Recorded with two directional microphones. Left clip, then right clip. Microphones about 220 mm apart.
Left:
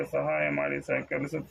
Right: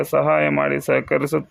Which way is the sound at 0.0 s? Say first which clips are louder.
Right 11 dB; 50° right (ahead or behind).